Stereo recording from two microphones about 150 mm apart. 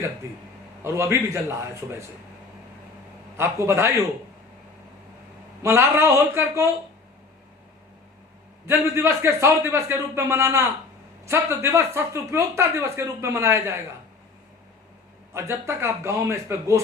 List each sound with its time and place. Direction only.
0.9 s a man's voice: 20° right (ahead or behind)
3.3 s speech: 15° right (ahead or behind)
5.6 s speech: 15° right (ahead or behind)
8.6 s speech: 15° right (ahead or behind)
15.3 s a man's voice: 15° right (ahead or behind)